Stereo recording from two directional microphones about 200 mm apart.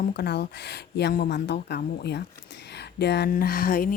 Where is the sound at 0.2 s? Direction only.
55° left (ahead or behind).